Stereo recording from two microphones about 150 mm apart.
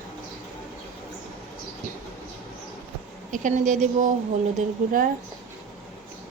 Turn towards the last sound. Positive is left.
turn(degrees=-50)  # may be behind; listen again after turning